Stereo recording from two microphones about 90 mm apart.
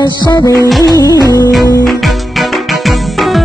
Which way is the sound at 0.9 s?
40° left (ahead or behind).